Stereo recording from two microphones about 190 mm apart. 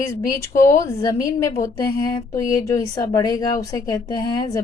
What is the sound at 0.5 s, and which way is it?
A woman's voice, 15° left (ahead or behind).